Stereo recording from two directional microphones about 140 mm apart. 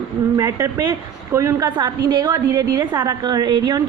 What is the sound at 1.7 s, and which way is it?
A woman's voice, 35° right (ahead or behind).